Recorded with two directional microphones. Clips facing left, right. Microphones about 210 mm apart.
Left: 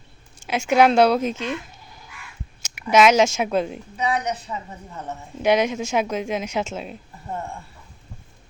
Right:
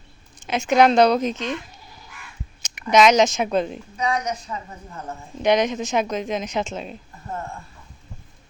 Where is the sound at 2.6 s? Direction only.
5° left (ahead or behind).